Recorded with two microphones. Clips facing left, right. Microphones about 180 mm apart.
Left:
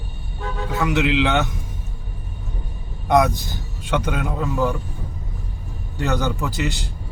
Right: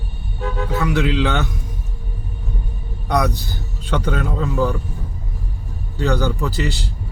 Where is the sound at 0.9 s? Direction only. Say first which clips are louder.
Left 1 dB; 20° left (ahead or behind).